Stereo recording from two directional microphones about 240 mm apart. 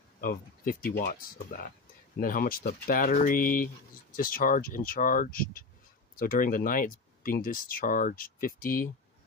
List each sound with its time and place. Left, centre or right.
0.2 s speech: left